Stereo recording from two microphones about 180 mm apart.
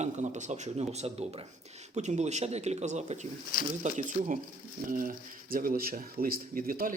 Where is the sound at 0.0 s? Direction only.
40° right (ahead or behind).